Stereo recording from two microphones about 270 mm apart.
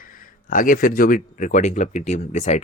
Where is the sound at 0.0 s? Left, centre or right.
Left.